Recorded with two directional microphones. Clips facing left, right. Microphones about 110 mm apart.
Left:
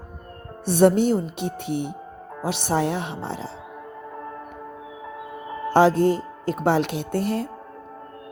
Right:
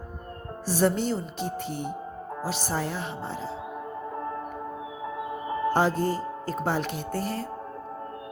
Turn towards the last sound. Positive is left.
turn(degrees=65)  # may be behind; listen again after turning